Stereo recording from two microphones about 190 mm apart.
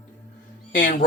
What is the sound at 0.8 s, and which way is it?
Speech, 45° left (ahead or behind).